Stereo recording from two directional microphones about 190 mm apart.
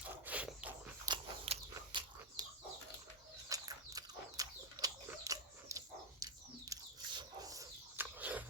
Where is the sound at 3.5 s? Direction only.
20° right (ahead or behind).